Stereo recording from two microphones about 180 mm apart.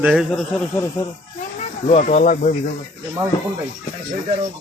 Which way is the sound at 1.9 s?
40° left (ahead or behind).